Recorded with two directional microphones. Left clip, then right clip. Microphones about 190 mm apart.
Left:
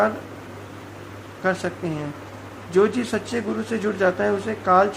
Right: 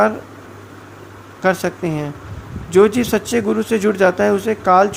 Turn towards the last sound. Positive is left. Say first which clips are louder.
# right 5 dB
turn(degrees=-35)  # may be behind; listen again after turning